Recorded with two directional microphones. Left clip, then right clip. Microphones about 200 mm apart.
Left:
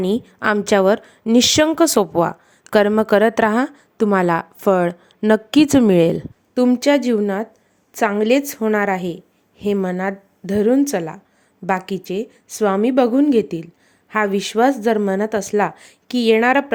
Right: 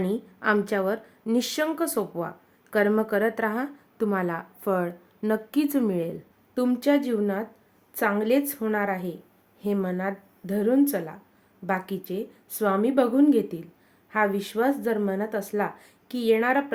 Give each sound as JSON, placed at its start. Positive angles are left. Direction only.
{"t": 0.0, "sound": "a woman's voice", "side_deg": 45}